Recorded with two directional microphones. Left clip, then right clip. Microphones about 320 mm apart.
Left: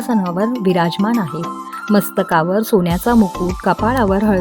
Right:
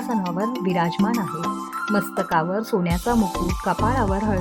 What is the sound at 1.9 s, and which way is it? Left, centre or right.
Speech, left.